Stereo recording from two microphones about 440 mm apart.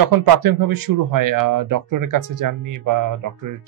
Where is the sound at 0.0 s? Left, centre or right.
Right.